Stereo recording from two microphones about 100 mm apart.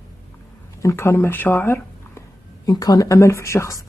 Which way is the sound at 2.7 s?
40° left (ahead or behind).